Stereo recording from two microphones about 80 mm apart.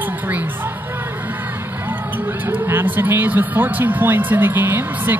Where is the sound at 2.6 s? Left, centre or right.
Right.